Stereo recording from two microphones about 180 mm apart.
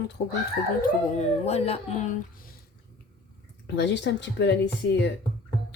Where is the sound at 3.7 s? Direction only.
80° left.